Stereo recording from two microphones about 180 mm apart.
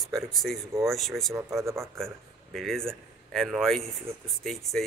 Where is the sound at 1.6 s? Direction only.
15° right (ahead or behind).